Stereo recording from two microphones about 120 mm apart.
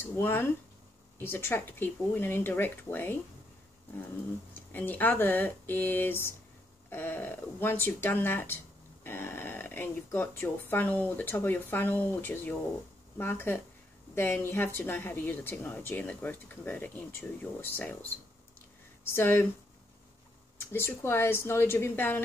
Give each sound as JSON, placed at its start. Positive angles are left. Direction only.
{"t": 0.0, "sound": "a woman's voice", "side_deg": 20}
{"t": 4.7, "sound": "a woman's voice", "side_deg": 15}
{"t": 20.5, "sound": "a woman's voice", "side_deg": 20}